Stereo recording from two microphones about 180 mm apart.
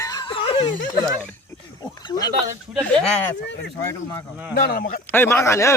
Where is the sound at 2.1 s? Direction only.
20° left (ahead or behind).